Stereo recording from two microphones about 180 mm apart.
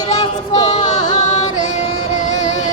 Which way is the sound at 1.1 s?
40° left (ahead or behind).